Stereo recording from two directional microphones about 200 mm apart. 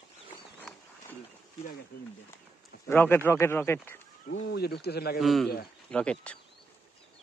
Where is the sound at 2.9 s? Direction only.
10° left (ahead or behind).